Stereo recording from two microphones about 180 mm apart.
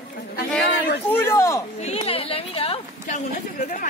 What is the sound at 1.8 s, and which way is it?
Speech, 40° left (ahead or behind).